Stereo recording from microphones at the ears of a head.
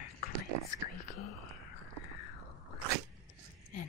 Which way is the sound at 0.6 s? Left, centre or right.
Left.